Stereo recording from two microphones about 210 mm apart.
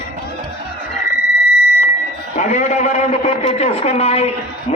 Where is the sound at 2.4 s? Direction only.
35° left (ahead or behind).